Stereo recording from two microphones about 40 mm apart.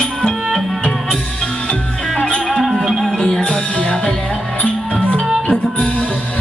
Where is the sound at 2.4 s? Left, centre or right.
Centre.